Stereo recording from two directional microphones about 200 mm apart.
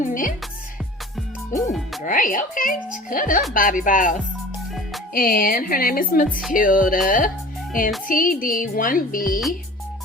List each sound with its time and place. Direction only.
0.0 s music: 40° left (ahead or behind)
1.5 s speech: 40° left (ahead or behind)
8.0 s speech: 45° left (ahead or behind)